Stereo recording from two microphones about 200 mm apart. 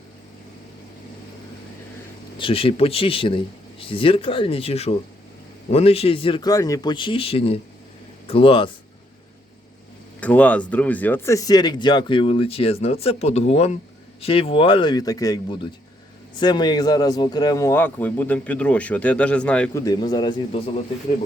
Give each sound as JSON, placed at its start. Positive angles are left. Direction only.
{"t": 2.4, "sound": "speech", "side_deg": 30}
{"t": 10.2, "sound": "a man's voice", "side_deg": 5}
{"t": 19.8, "sound": "speech", "side_deg": 20}